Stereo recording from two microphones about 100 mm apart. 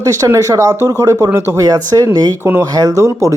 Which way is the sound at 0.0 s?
30° right (ahead or behind).